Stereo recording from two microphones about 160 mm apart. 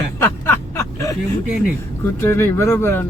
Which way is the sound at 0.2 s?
15° left (ahead or behind).